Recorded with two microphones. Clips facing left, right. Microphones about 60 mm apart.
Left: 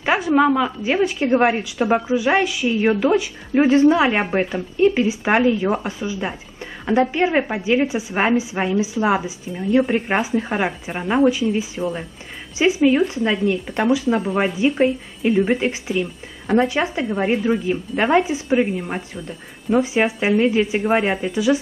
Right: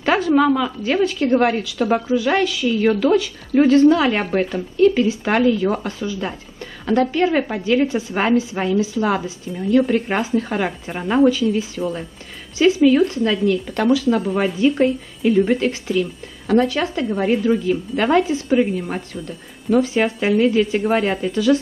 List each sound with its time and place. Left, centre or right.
0.0 s a woman's voice: centre
11.8 s speech: centre
12.5 s a woman's voice: centre
18.8 s speech: centre